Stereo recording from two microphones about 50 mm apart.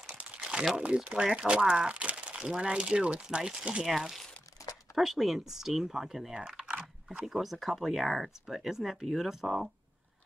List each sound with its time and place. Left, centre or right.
0.4 s crumpling: centre
0.7 s speech: right
6.3 s biting: centre
7.2 s speech: centre